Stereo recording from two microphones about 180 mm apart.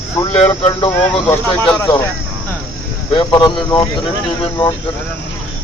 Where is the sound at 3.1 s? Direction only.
25° left (ahead or behind).